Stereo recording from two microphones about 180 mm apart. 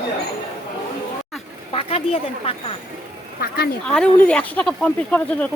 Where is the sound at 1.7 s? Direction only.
30° left (ahead or behind).